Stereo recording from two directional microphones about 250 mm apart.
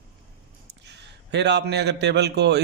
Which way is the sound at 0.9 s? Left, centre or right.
Right.